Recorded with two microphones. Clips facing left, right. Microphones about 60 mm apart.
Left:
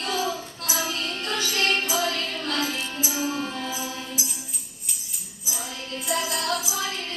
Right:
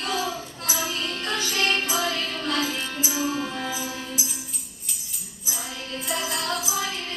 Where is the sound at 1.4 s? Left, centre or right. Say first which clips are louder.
Even; right.